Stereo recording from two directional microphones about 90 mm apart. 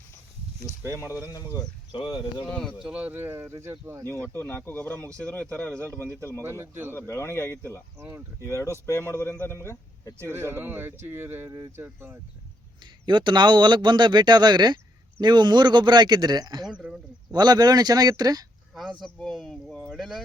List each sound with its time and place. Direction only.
1.0 s speech: 25° right (ahead or behind)
2.0 s speech: 75° left (ahead or behind)
2.5 s speech: 10° left (ahead or behind)
2.8 s speech: 10° right (ahead or behind); by 4.0 s 30° right (ahead or behind)
4.0 s speech: 20° left (ahead or behind)
6.4 s speech: 25° right (ahead or behind)
7.1 s speech: 25° left (ahead or behind)
7.9 s speech: 25° right (ahead or behind)
8.4 s speech: 30° left (ahead or behind)
10.3 s speech: 25° right (ahead or behind)
12.8 s a man's voice: 60° right (ahead or behind)
16.6 s a sound: 10° right (ahead or behind)
17.3 s speech: 50° right (ahead or behind)
18.7 s speech: centre (ahead or behind)